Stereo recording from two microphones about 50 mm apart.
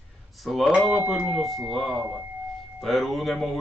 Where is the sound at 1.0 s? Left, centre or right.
Right.